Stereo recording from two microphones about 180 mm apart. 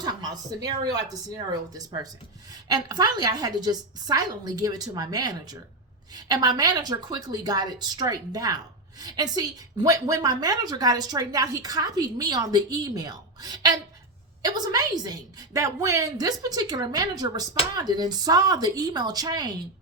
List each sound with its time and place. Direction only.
0.0 s a woman's voice: 20° right (ahead or behind)
2.5 s a woman's voice: 20° right (ahead or behind)